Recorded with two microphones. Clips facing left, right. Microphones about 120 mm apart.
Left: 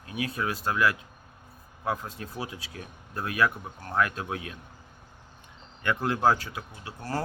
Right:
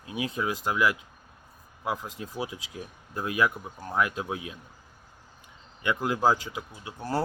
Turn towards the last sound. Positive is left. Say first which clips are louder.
# right 3 dB
turn(degrees=-15)  # may be behind; listen again after turning